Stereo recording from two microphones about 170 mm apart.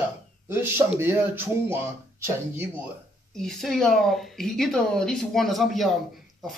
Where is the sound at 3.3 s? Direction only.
5° left (ahead or behind).